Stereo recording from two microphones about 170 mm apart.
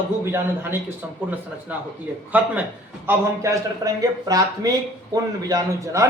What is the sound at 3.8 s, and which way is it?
A man's voice, 25° right (ahead or behind).